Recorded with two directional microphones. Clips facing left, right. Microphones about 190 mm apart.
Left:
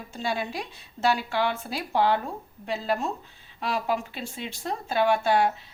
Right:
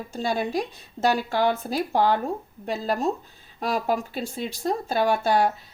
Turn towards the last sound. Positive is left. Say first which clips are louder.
# right 1 dB
turn(degrees=-40)  # may be behind; listen again after turning